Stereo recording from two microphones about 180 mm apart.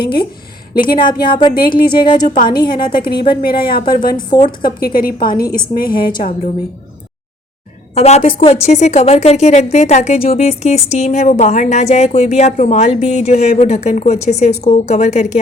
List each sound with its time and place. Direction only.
0.0 s a woman's voice: 60° left (ahead or behind)
1.2 s speech: 25° left (ahead or behind)
1.5 s a woman's voice: 55° left (ahead or behind)
1.9 s speech: 25° left (ahead or behind)
2.3 s a woman's voice: 50° left (ahead or behind)
2.6 s speech: 25° left (ahead or behind)
3.6 s a woman's voice: 55° left (ahead or behind)
4.3 s speech: 25° left (ahead or behind)
4.8 s a woman's voice: 50° left (ahead or behind)
7.9 s speech: 35° left (ahead or behind)